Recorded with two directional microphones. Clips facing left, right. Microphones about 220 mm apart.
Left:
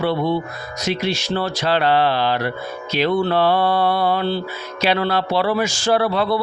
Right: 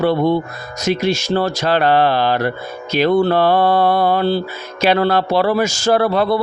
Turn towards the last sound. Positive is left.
turn(degrees=-45)  # may be behind; listen again after turning